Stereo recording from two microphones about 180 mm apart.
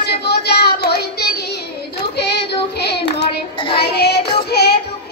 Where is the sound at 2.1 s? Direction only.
65° left (ahead or behind).